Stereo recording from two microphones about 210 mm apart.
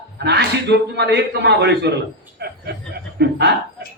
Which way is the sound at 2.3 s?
50° right (ahead or behind).